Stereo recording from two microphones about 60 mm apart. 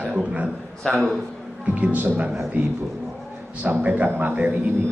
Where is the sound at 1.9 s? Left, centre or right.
Right.